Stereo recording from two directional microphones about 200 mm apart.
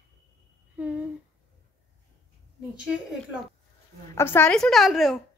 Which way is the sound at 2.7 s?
5° right (ahead or behind).